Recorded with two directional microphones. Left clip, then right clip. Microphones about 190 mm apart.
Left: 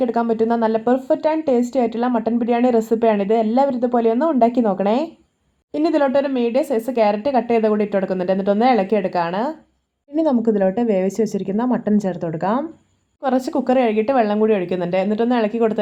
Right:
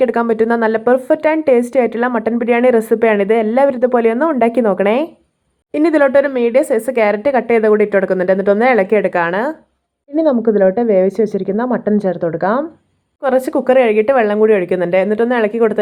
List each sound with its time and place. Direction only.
0.4 s speech: 20° right (ahead or behind)
2.6 s a woman's voice: 50° right (ahead or behind)
2.9 s speech: 20° right (ahead or behind)